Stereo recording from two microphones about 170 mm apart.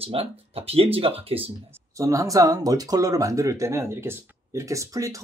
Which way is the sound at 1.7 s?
20° right (ahead or behind).